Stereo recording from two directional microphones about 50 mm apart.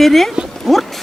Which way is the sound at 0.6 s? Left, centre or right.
Centre.